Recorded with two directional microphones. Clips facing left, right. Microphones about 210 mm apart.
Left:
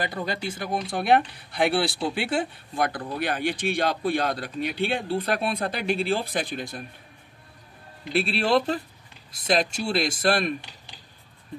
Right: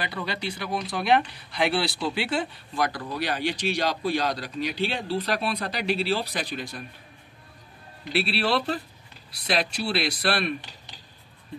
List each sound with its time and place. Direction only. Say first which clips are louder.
0.0 s speech: left 2 dB; 45° left (ahead or behind)
8.1 s speech: left 3 dB; 50° left (ahead or behind)